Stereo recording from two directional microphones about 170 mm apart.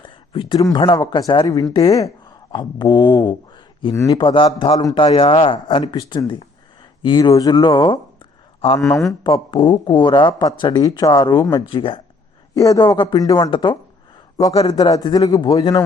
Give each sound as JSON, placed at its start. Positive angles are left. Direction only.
{"t": 0.0, "sound": "speech", "side_deg": 30}
{"t": 4.2, "sound": "speech", "side_deg": 30}
{"t": 9.2, "sound": "speech", "side_deg": 25}
{"t": 12.5, "sound": "speech", "side_deg": 20}
{"t": 14.8, "sound": "speech", "side_deg": 20}